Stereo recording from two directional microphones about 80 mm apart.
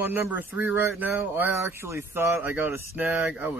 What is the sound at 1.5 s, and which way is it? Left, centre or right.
Speech, right.